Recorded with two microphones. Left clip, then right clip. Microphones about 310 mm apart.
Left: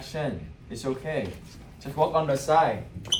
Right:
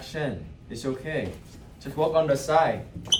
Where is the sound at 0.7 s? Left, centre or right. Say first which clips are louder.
Even; centre.